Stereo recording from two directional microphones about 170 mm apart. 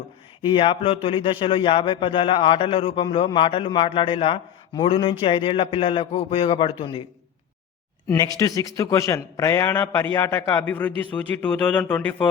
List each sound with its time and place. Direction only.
0.4 s speech: 30° left (ahead or behind)
8.0 s a man's voice: 20° left (ahead or behind)